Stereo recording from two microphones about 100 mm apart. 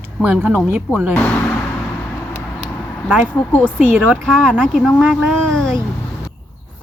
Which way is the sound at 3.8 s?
15° right (ahead or behind).